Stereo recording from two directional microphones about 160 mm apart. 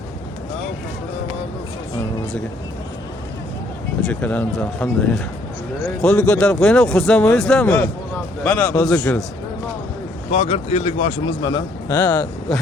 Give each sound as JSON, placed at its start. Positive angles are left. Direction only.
{"t": 4.0, "sound": "a man's voice", "side_deg": 10}
{"t": 10.3, "sound": "speech", "side_deg": 40}
{"t": 11.9, "sound": "speech", "side_deg": 10}